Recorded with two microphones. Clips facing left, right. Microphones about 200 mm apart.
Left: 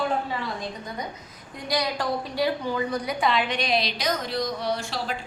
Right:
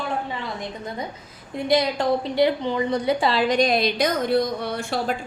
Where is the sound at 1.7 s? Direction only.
25° right (ahead or behind); by 5.2 s 55° right (ahead or behind).